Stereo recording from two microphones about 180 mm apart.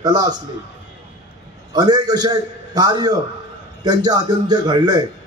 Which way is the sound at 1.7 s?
25° right (ahead or behind).